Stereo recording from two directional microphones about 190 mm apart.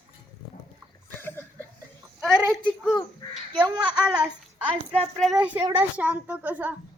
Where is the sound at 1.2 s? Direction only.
10° left (ahead or behind).